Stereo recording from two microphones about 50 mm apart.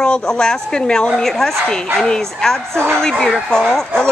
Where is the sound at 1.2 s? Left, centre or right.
Centre.